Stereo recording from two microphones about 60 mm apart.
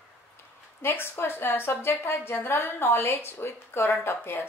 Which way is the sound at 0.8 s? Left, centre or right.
Left.